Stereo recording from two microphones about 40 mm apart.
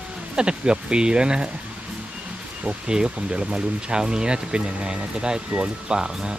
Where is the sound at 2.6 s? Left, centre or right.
Right.